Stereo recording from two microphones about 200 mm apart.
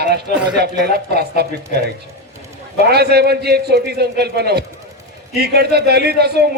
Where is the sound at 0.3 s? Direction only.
40° left (ahead or behind).